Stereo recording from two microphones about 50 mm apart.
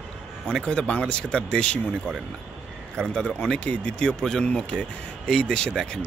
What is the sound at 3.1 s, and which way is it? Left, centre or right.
Speech, centre.